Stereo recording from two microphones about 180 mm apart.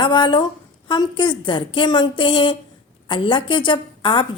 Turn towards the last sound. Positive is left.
turn(degrees=25)  # may be behind; listen again after turning